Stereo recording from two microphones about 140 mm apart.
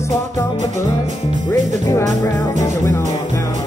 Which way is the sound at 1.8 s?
25° left (ahead or behind).